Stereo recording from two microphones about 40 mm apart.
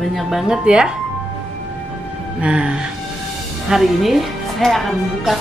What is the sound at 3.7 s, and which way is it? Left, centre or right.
Speech, centre.